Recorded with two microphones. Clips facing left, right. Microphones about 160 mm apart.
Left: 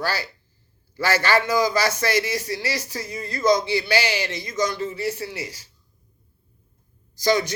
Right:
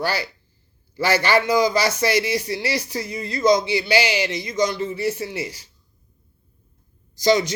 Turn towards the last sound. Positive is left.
turn(degrees=-20)  # may be behind; listen again after turning